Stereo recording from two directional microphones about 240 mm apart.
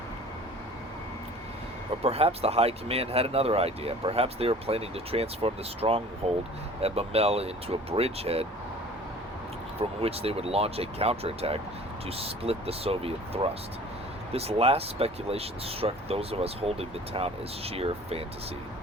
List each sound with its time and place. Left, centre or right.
2.0 s speech: right
10.0 s speech: right